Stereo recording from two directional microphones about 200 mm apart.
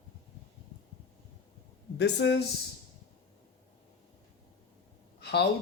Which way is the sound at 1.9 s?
60° left (ahead or behind).